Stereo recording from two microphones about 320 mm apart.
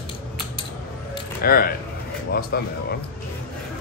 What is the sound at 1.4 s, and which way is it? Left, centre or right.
A man's voice, left.